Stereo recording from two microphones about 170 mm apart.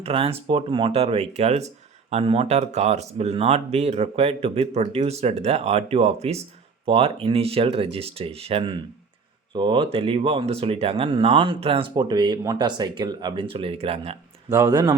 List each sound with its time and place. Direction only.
0.0 s speech: 35° right (ahead or behind)
14.5 s speech: 20° right (ahead or behind)